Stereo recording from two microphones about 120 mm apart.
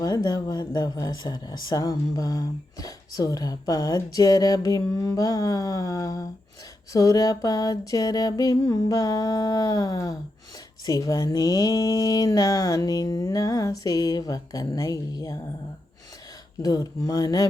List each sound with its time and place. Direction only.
0.0 s speech: 30° left (ahead or behind)
16.6 s speech: 30° left (ahead or behind)